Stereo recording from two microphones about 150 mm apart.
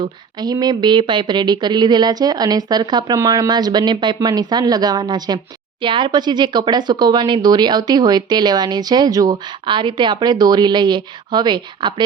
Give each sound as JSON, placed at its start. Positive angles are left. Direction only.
{"t": 0.0, "sound": "speech", "side_deg": -25}